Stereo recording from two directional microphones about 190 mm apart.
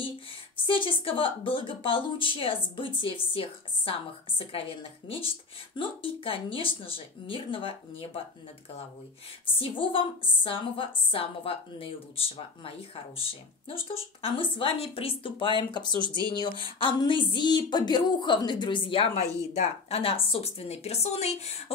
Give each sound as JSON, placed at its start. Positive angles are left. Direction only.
{"t": 0.7, "sound": "a woman's voice", "side_deg": 25}
{"t": 9.6, "sound": "a woman's voice", "side_deg": 30}